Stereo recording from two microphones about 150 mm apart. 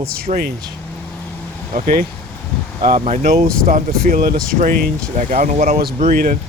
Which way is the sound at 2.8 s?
55° right (ahead or behind).